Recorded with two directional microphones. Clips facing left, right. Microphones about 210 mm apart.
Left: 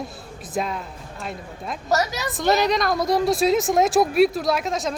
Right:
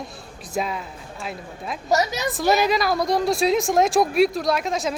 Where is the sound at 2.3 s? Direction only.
5° right (ahead or behind).